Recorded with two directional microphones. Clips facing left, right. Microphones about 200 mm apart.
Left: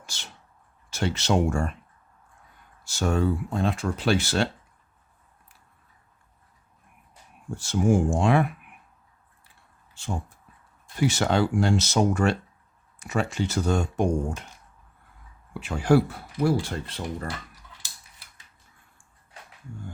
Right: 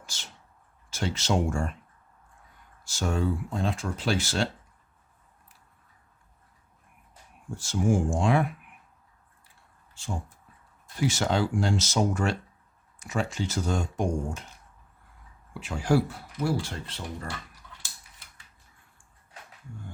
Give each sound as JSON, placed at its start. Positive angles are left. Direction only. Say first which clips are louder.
{"t": 0.0, "sound": "a sound", "louder": "left 2 dB", "side_deg": 65}
{"t": 0.9, "sound": "speech", "louder": "left 3 dB", "side_deg": 65}
{"t": 2.8, "sound": "speech", "louder": "left 4 dB", "side_deg": 65}
{"t": 7.5, "sound": "speech", "louder": "left 3 dB", "side_deg": 65}
{"t": 11.0, "sound": "speech", "louder": "left 3 dB", "side_deg": 65}
{"t": 15.6, "sound": "speech", "louder": "left 4 dB", "side_deg": 60}